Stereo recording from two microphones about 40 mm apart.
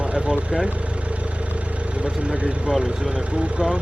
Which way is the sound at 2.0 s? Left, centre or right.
Right.